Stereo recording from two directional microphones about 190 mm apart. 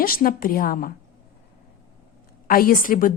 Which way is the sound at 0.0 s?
50° left (ahead or behind).